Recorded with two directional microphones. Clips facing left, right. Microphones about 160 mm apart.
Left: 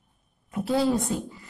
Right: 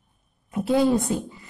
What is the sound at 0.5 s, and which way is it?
Speech, 20° right (ahead or behind).